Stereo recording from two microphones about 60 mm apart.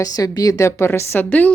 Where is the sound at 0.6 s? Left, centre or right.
Left.